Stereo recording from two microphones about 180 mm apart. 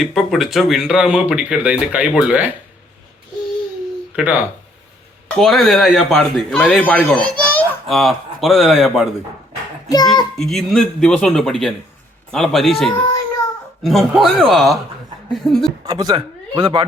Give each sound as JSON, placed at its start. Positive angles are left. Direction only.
{"t": 0.0, "sound": "a man's voice", "side_deg": 0}
{"t": 4.1, "sound": "a man's voice", "side_deg": -5}
{"t": 9.9, "sound": "a child's voice", "side_deg": 20}
{"t": 10.3, "sound": "a man's voice", "side_deg": 0}
{"t": 15.8, "sound": "a man's voice", "side_deg": -20}